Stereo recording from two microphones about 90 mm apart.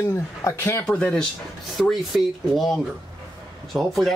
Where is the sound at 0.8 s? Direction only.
10° left (ahead or behind).